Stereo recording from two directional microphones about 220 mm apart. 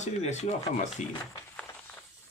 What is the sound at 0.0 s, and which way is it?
Speech, 30° left (ahead or behind).